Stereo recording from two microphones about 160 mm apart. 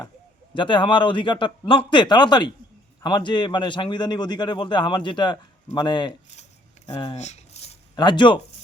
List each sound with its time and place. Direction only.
0.5 s a man's voice: 30° left (ahead or behind)
6.9 s a sound: 40° left (ahead or behind)
7.9 s a man's voice: 30° left (ahead or behind)